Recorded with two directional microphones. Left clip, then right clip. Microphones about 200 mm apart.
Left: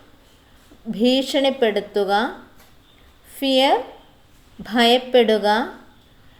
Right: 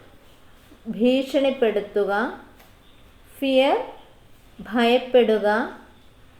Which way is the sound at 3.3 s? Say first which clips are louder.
Left 2 dB; 50° left (ahead or behind).